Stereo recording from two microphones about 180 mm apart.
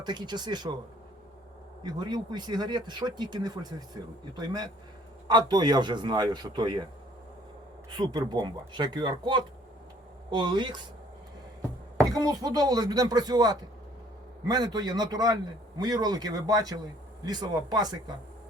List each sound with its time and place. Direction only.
0.0 s speech: 25° right (ahead or behind)
1.8 s speech: 20° right (ahead or behind)
7.9 s speech: 25° right (ahead or behind)
11.9 s speech: 20° right (ahead or behind)